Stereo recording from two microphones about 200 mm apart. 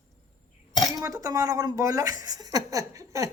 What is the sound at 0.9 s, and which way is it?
A woman's voice, 15° right (ahead or behind).